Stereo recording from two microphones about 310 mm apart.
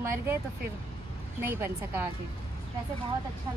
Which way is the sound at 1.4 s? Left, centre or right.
Centre.